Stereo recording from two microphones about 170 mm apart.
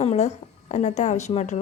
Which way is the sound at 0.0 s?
40° left (ahead or behind).